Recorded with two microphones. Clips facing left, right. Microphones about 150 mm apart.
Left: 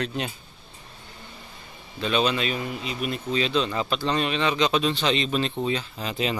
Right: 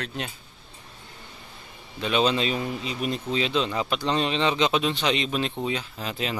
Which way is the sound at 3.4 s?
20° right (ahead or behind).